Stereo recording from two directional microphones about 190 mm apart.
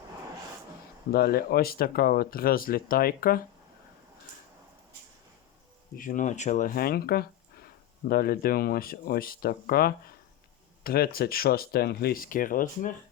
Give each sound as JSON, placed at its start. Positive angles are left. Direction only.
{"t": 1.1, "sound": "speech", "side_deg": 55}
{"t": 6.0, "sound": "speech", "side_deg": 45}